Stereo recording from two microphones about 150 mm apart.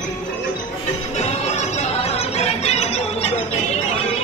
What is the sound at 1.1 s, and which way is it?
Music, 50° left (ahead or behind).